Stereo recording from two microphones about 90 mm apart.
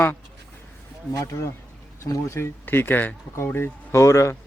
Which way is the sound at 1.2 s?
35° left (ahead or behind).